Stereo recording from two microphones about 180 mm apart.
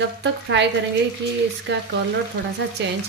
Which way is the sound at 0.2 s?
75° right (ahead or behind).